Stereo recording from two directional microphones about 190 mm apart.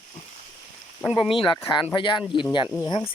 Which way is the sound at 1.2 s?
25° left (ahead or behind).